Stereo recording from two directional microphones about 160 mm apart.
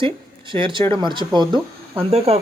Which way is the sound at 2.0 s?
40° right (ahead or behind).